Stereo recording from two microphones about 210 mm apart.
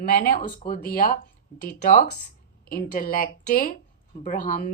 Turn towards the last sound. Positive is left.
turn(degrees=40)  # may be behind; listen again after turning